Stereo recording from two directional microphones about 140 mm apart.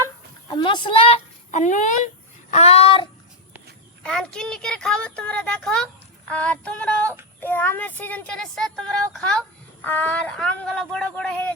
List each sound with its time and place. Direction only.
0.5 s a woman's voice: 35° left (ahead or behind)
1.5 s speech: 60° left (ahead or behind)
2.5 s speech: 50° left (ahead or behind)
4.0 s speech: 5° left (ahead or behind)
6.3 s female singing: 10° left (ahead or behind)